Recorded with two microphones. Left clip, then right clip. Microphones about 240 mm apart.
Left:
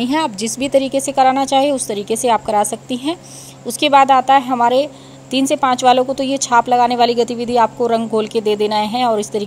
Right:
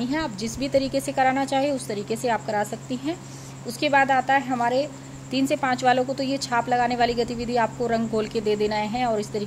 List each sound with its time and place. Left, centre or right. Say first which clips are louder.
0.0 s a woman's voice: left 9 dB; left
3.9 s a woman's voice: left 9 dB; left